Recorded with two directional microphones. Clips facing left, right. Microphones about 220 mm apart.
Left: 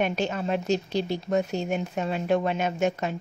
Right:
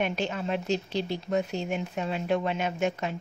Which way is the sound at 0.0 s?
45° left (ahead or behind).